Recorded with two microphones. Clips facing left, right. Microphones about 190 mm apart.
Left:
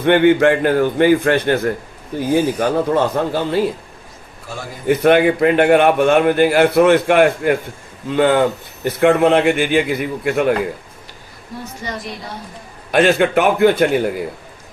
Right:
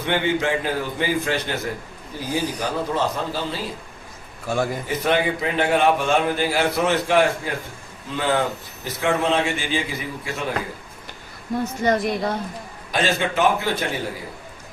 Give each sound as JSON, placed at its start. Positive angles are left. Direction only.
{"t": 0.0, "sound": "a man's voice", "side_deg": 60}
{"t": 4.9, "sound": "a man's voice", "side_deg": 60}
{"t": 11.9, "sound": "a woman's voice", "side_deg": -55}
{"t": 12.9, "sound": "a man's voice", "side_deg": 60}